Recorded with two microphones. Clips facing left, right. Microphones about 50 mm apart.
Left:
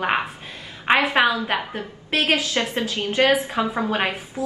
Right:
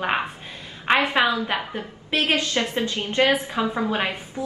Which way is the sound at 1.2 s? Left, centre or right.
Left.